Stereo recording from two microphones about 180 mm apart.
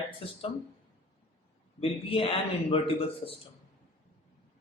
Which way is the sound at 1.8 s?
30° left (ahead or behind).